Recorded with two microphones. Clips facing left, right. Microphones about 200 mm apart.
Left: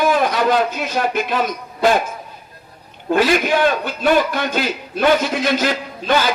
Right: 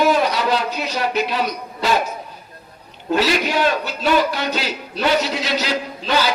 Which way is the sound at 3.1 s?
50° left (ahead or behind).